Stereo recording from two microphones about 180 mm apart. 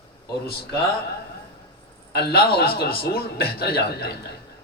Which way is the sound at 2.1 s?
60° left (ahead or behind).